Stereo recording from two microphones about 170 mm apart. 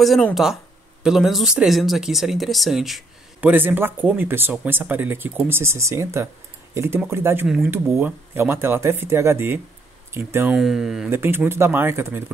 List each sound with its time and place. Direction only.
0.0 s speech: centre (ahead or behind); by 7.4 s 15° right (ahead or behind)
7.4 s speech: 5° right (ahead or behind)
7.7 s speech: 15° right (ahead or behind)
10.5 s speech: centre (ahead or behind)
11.1 s speech: 15° right (ahead or behind)